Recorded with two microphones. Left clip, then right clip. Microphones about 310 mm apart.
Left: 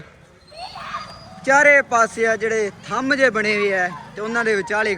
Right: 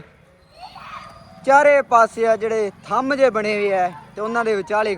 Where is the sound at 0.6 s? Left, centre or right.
Left.